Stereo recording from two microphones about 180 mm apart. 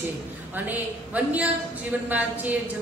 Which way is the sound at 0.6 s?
10° right (ahead or behind).